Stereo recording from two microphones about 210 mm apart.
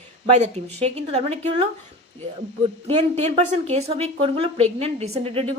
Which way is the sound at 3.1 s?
30° right (ahead or behind).